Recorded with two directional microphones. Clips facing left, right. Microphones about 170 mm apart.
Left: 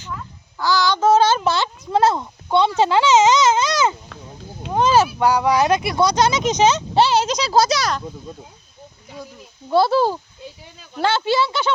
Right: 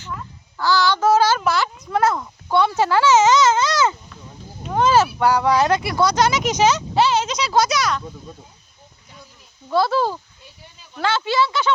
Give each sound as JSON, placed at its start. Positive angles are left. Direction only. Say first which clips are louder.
{"t": 0.6, "sound": "speech", "louder": "even", "side_deg": 15}
{"t": 9.6, "sound": "speech", "louder": "left 3 dB", "side_deg": 30}